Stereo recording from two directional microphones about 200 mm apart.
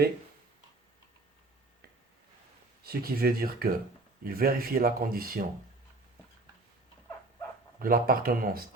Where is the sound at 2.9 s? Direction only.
50° right (ahead or behind).